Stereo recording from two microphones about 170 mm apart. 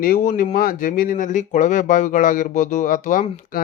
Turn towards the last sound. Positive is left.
turn(degrees=50)  # may be behind; listen again after turning